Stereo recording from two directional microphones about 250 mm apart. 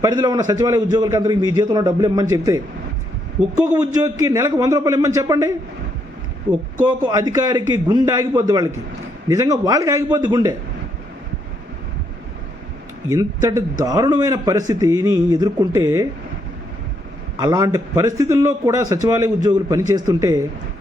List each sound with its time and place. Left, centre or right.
0.0 s a man's voice: centre
3.6 s a man's voice: centre
6.5 s a man's voice: centre
13.1 s a man's voice: centre
17.4 s a man's voice: centre